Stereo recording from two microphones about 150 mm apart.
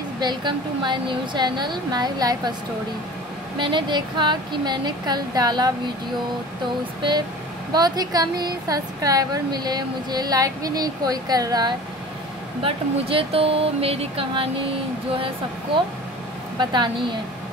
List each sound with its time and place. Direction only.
0.2 s speech: 30° right (ahead or behind)
3.5 s speech: 35° right (ahead or behind)
7.0 s speech: 30° right (ahead or behind)
12.6 s speech: 40° right (ahead or behind)